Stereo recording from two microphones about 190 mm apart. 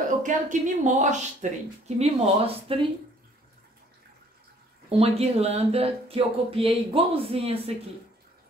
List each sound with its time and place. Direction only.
0.2 s speech: 40° right (ahead or behind)
4.8 s speech: 30° right (ahead or behind)